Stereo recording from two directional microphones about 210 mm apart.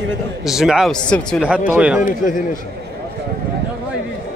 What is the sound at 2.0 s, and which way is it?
Speech, 40° left (ahead or behind).